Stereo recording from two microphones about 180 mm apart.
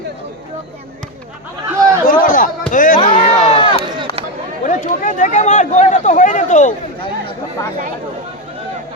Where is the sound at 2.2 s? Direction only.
50° left (ahead or behind).